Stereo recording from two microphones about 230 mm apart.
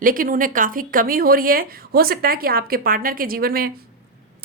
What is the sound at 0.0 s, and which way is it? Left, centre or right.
A woman's voice, right.